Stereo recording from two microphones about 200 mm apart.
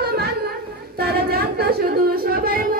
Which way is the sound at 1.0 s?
50° right (ahead or behind).